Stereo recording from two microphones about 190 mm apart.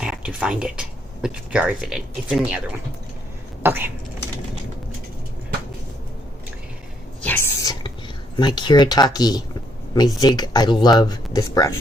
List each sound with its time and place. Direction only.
0.0 s speech: 5° right (ahead or behind)
7.2 s a sound: 10° left (ahead or behind)
8.4 s speech: 25° left (ahead or behind)